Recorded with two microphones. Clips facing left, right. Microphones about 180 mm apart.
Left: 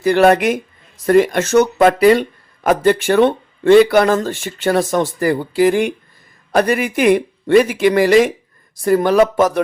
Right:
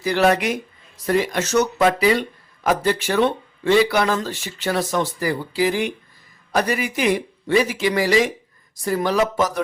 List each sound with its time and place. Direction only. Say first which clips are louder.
0.0 s speech: left 6 dB; 50° left (ahead or behind)